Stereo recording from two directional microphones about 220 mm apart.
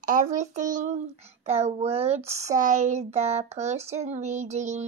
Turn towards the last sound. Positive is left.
turn(degrees=-30)  # may be behind; listen again after turning